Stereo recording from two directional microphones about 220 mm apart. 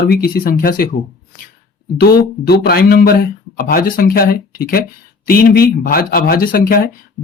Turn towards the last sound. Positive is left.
turn(degrees=40)  # may be behind; listen again after turning